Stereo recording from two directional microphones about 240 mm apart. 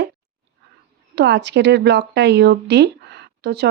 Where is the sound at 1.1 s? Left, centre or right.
Right.